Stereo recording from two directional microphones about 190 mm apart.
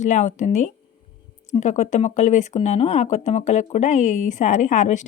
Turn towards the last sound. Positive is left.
turn(degrees=40)  # may be behind; listen again after turning